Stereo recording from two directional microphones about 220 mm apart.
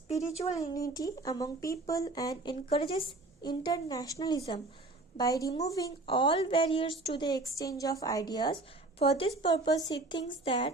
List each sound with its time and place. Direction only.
0.2 s a woman's voice: 30° left (ahead or behind)
0.5 s a woman's voice: 15° left (ahead or behind)